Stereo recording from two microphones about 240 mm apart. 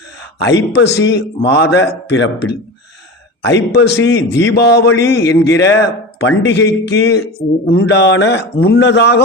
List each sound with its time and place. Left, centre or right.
0.4 s a man's voice: left
3.9 s a man's voice: centre
4.5 s a man's voice: left
4.9 s a man's voice: centre
5.8 s a man's voice: left